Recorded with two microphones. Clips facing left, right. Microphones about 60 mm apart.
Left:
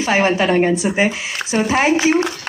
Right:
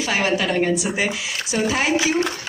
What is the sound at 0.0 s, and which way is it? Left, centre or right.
Speech, left.